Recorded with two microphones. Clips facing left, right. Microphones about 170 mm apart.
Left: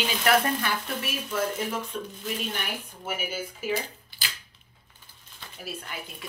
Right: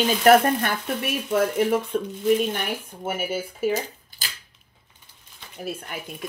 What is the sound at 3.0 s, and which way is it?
Speech, 50° right (ahead or behind).